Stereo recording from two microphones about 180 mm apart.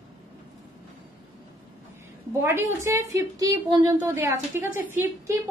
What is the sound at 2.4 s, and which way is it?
A woman's voice, 15° right (ahead or behind).